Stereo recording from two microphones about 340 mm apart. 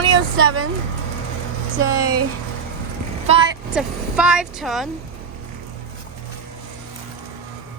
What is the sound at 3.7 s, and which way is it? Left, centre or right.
Speech, centre.